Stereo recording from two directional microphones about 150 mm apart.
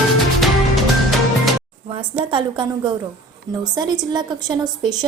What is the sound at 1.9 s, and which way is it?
A woman's voice, 30° right (ahead or behind).